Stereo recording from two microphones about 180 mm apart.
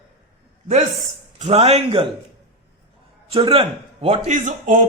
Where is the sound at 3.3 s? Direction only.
30° right (ahead or behind); by 4.8 s 50° right (ahead or behind).